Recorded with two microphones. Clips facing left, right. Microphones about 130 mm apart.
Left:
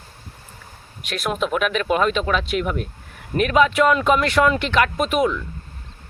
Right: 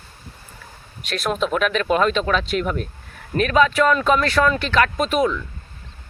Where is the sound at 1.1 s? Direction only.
10° left (ahead or behind).